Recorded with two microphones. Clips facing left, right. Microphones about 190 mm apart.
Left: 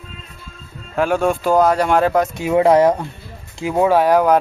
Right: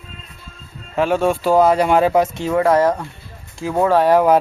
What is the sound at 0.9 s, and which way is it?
Speech, centre (ahead or behind).